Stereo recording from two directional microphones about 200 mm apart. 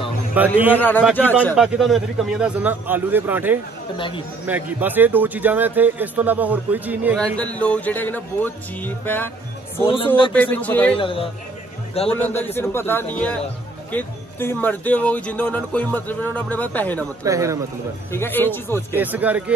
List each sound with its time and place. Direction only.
0.4 s a man's voice: 10° right (ahead or behind)
0.7 s speech: 10° left (ahead or behind)
1.5 s a man's voice: centre (ahead or behind)
7.2 s speech: 5° left (ahead or behind)
9.8 s a man's voice: 25° left (ahead or behind)
10.3 s speech: 5° left (ahead or behind)
11.0 s a man's voice: 25° left (ahead or behind)
12.1 s speech: 10° left (ahead or behind)
17.2 s a man's voice: 15° right (ahead or behind)
18.1 s speech: 10° left (ahead or behind)
18.9 s a man's voice: 10° right (ahead or behind)